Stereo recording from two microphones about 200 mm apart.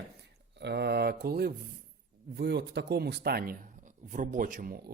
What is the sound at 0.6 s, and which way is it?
Mantra, 55° right (ahead or behind).